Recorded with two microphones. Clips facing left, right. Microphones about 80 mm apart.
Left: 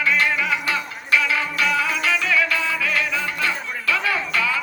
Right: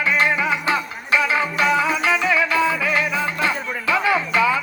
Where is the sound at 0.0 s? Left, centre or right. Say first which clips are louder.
Right 2 dB; right.